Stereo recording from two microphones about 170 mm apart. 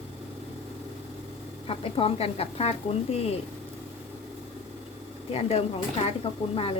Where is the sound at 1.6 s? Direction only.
35° left (ahead or behind).